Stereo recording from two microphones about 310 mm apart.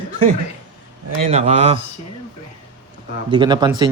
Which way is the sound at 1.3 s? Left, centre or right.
Right.